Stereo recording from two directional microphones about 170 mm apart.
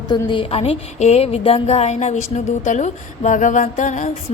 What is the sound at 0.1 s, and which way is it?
Speech, 30° left (ahead or behind).